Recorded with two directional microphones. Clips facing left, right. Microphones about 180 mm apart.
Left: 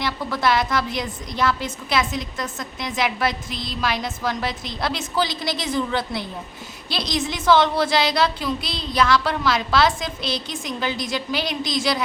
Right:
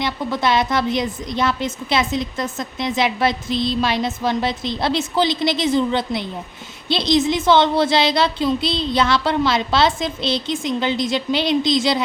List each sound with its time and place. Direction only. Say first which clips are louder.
0.0 s a woman's voice: right 2 dB; 20° right (ahead or behind)